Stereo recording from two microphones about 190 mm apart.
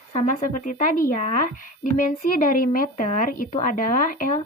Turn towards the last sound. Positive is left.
turn(degrees=45)  # may be behind; listen again after turning